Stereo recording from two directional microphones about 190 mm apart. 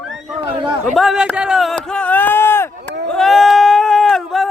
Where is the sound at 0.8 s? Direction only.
Centre (ahead or behind).